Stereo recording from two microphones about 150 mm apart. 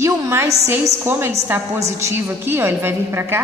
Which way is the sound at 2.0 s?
15° right (ahead or behind).